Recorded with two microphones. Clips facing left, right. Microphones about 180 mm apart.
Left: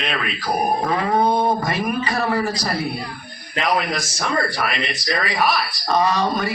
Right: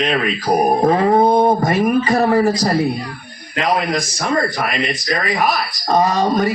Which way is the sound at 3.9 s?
40° right (ahead or behind).